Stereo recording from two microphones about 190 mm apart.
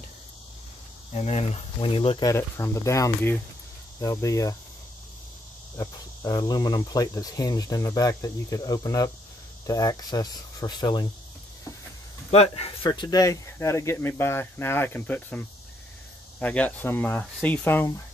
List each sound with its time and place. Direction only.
1.1 s speech: 35° left (ahead or behind); by 4.6 s 15° left (ahead or behind)
5.8 s speech: 20° left (ahead or behind)
12.3 s speech: 30° left (ahead or behind); by 17.9 s 10° left (ahead or behind)